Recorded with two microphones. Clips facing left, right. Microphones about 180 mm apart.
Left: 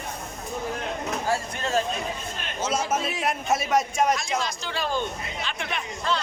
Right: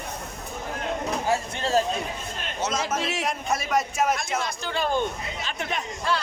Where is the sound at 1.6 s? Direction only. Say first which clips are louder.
Right 4 dB; 35° right (ahead or behind).